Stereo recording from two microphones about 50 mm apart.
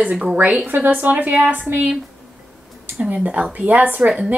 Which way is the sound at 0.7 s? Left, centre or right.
Right.